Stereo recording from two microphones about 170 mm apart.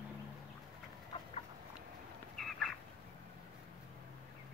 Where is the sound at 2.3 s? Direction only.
Centre (ahead or behind).